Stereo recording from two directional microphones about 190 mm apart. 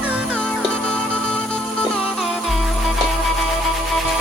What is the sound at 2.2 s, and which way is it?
Music, centre (ahead or behind).